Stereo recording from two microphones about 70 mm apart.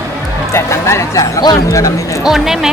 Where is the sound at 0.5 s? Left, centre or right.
Left.